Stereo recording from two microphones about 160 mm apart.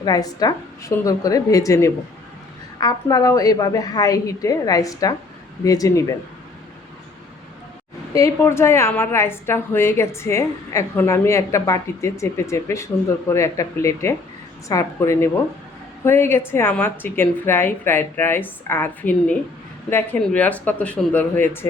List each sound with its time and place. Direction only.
0.0 s a woman's voice: 25° left (ahead or behind)
8.1 s a woman's voice: 20° left (ahead or behind)